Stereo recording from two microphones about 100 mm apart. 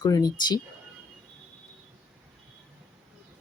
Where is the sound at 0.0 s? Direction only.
40° left (ahead or behind).